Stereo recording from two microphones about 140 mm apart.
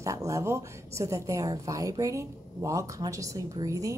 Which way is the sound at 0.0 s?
20° right (ahead or behind).